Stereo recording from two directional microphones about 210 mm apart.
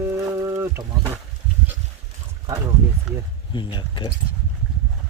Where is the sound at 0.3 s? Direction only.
15° right (ahead or behind).